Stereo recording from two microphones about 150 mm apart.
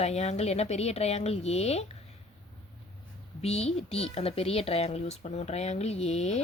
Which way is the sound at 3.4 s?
45° left (ahead or behind).